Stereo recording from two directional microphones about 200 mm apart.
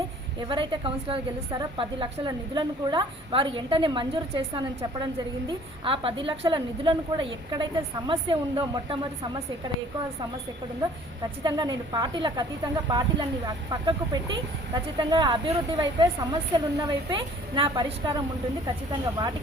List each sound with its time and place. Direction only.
0.3 s a woman's voice: 25° right (ahead or behind)
11.4 s a woman's voice: 20° right (ahead or behind)